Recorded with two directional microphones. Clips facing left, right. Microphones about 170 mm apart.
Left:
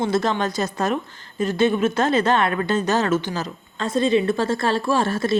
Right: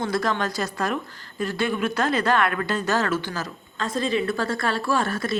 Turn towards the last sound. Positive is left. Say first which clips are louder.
# left 4 dB
turn(degrees=25)  # may be behind; listen again after turning